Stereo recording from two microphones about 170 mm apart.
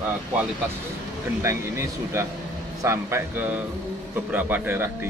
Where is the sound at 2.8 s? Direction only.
15° right (ahead or behind).